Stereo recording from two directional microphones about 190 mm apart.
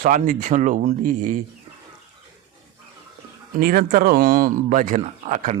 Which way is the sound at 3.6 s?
50° right (ahead or behind).